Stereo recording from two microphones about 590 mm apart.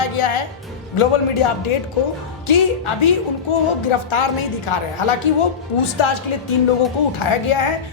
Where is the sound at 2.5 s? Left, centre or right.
Left.